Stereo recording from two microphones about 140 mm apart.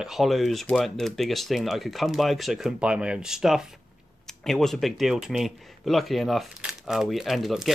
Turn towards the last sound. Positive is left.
turn(degrees=0)  # may be behind; listen again after turning